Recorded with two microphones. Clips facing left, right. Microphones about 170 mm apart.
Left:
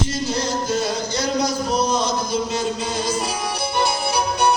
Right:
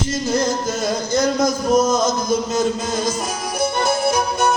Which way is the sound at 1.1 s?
45° right (ahead or behind).